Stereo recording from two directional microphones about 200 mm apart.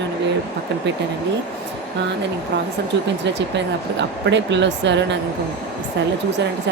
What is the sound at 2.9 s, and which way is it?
Speech, 60° right (ahead or behind).